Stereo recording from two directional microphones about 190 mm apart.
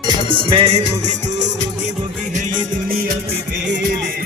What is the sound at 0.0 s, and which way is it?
Music, 25° right (ahead or behind).